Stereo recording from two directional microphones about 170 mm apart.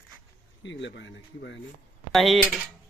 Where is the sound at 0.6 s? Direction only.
90° left.